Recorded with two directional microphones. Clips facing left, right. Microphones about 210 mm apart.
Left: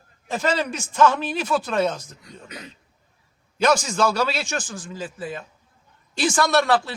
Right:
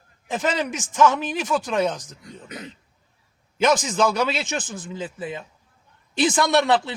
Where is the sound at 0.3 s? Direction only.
15° right (ahead or behind).